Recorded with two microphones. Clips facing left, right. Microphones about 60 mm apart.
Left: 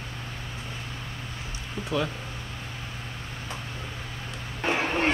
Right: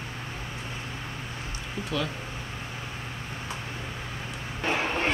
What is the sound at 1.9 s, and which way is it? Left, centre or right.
Speech, left.